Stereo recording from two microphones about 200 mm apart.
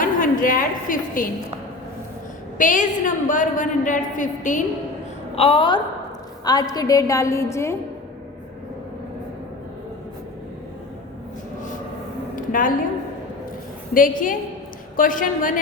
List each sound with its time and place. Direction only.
0.0 s a woman's voice: 45° left (ahead or behind)
2.6 s a woman's voice: 40° left (ahead or behind)
5.3 s a woman's voice: 30° left (ahead or behind)
12.4 s a sound: 40° left (ahead or behind)
13.9 s a woman's voice: 45° left (ahead or behind)